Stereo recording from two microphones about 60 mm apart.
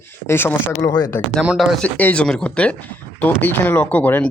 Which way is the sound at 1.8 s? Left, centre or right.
Left.